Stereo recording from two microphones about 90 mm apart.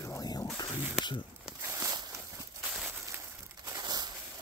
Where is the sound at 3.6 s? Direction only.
50° right (ahead or behind).